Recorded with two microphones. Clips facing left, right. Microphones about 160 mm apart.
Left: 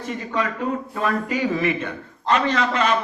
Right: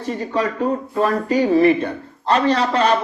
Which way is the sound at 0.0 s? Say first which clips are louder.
Right 4 dB; 35° right (ahead or behind).